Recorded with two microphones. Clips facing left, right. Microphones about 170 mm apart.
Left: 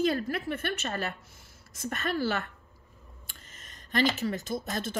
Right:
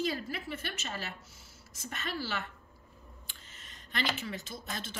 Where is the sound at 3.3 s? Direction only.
45° left (ahead or behind).